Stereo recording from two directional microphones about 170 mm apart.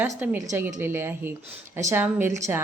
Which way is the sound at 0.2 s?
10° right (ahead or behind).